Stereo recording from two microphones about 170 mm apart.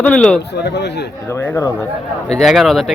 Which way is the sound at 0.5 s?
80° left.